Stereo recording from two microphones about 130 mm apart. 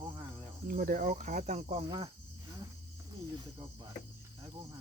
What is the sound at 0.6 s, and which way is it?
Speech, 90° right.